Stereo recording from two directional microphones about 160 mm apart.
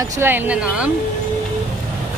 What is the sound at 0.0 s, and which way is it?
Speech, 15° right (ahead or behind).